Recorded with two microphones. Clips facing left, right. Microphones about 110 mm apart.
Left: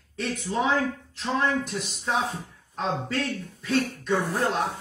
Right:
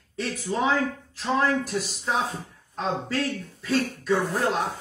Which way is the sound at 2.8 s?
35° right (ahead or behind).